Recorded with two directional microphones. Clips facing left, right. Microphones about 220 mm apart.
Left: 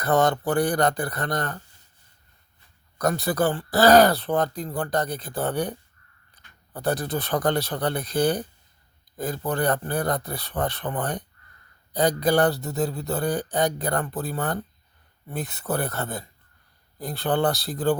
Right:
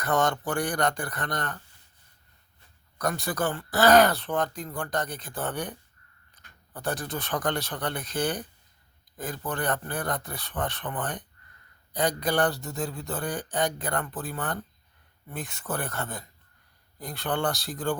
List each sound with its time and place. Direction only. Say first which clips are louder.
0.0 s speech: left 5 dB; 35° left (ahead or behind)
3.0 s speech: left 6 dB; 40° left (ahead or behind)
6.7 s speech: left 6 dB; 35° left (ahead or behind)